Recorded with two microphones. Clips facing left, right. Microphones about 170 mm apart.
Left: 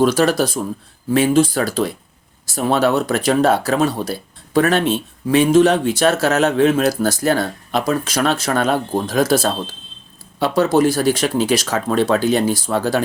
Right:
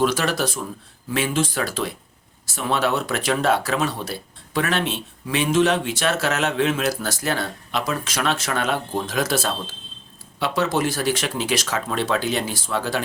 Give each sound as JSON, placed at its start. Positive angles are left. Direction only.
{"t": 0.0, "sound": "speech", "side_deg": 35}